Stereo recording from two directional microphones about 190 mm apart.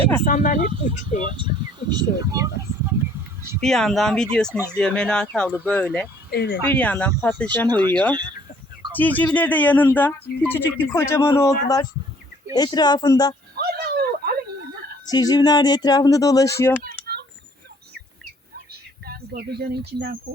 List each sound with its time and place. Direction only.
0.3 s speech: 45° left (ahead or behind)
0.7 s speech: 25° right (ahead or behind)
3.6 s speech: centre (ahead or behind)
4.5 s speech: 10° right (ahead or behind)
4.8 s speech: 5° left (ahead or behind)
6.3 s speech: 60° left (ahead or behind)
6.7 s speech: 5° left (ahead or behind)
8.1 s a sound: 20° right (ahead or behind)
8.9 s speech: 10° left (ahead or behind)
12.5 s speech: 20° left (ahead or behind)
13.6 s a sound: 55° right (ahead or behind)
15.0 s speech: 20° left (ahead or behind)
16.8 s typing: 55° right (ahead or behind)
18.7 s a sound: 55° right (ahead or behind)